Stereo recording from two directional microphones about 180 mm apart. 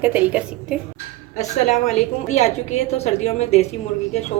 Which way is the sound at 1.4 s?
40° left (ahead or behind).